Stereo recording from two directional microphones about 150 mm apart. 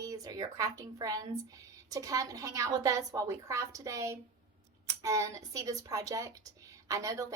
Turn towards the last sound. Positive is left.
turn(degrees=-20)  # may be behind; listen again after turning